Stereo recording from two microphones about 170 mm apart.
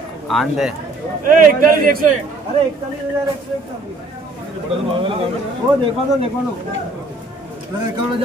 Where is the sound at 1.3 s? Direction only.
55° right (ahead or behind).